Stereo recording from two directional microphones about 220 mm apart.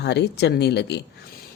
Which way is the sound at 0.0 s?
50° left (ahead or behind).